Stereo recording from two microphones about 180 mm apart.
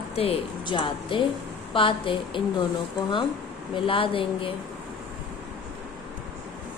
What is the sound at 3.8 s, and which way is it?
Speech, 30° left (ahead or behind).